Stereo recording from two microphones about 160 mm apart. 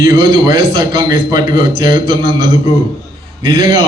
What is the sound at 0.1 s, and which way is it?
A man's voice, 30° right (ahead or behind).